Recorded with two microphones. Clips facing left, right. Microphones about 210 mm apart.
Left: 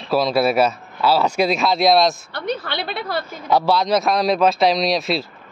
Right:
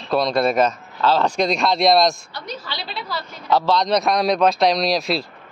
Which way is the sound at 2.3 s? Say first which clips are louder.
Left 7 dB; 60° left (ahead or behind).